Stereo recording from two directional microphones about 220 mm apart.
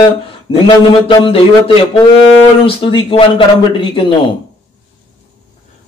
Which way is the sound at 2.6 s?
25° left (ahead or behind).